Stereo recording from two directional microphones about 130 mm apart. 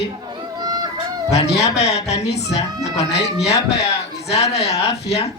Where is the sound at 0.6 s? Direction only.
30° right (ahead or behind).